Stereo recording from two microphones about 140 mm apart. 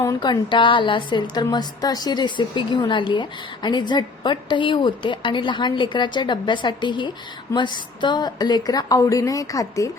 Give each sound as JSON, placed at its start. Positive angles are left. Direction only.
{"t": 0.2, "sound": "a woman's voice", "side_deg": 35}